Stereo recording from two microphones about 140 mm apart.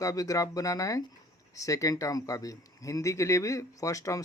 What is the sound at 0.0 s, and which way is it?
Speech, 25° left (ahead or behind).